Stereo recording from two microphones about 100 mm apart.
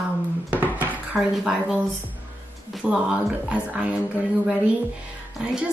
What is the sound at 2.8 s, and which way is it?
Speech, 10° right (ahead or behind).